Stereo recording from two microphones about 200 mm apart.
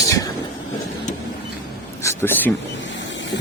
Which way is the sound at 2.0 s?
10° left (ahead or behind).